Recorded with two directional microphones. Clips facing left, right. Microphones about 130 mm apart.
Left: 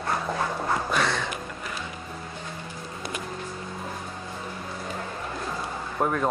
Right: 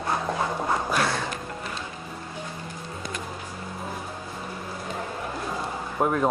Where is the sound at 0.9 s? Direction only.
5° right (ahead or behind).